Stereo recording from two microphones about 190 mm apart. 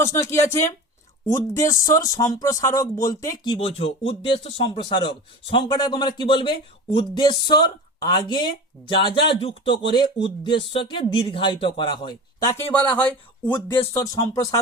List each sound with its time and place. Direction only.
0.0 s a man's voice: 15° left (ahead or behind)
12.7 s speech: 5° left (ahead or behind)
13.5 s speech: 20° left (ahead or behind)